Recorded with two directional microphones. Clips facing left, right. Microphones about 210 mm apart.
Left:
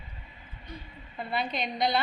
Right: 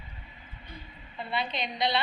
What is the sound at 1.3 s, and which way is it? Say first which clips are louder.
Speech: left 1 dB; 50° left (ahead or behind).